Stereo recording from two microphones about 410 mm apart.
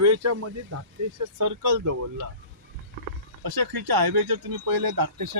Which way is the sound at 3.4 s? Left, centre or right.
Right.